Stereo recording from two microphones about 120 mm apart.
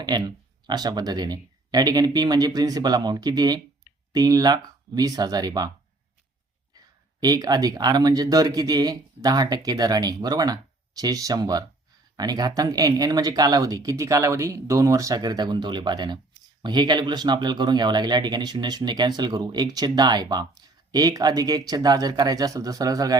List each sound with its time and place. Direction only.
0.0 s speech: 35° right (ahead or behind)
7.2 s speech: 35° right (ahead or behind)